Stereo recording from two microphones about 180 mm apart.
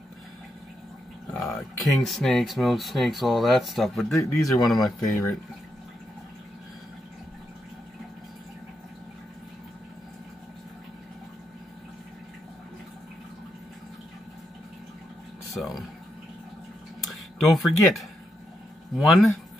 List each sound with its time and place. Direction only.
1.4 s speech: centre (ahead or behind)
4.2 s speech: 15° left (ahead or behind)
4.6 s speech: centre (ahead or behind)
15.5 s a sound: centre (ahead or behind)
17.1 s speech: centre (ahead or behind)